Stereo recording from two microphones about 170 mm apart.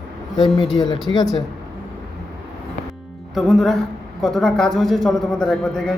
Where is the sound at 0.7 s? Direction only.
25° left (ahead or behind).